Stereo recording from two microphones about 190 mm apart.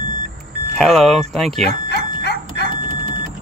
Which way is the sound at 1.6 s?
60° left (ahead or behind).